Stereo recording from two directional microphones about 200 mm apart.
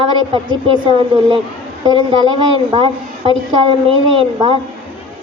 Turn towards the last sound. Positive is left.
turn(degrees=-25)  # may be behind; listen again after turning